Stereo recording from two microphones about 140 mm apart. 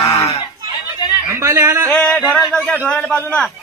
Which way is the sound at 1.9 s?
5° left (ahead or behind).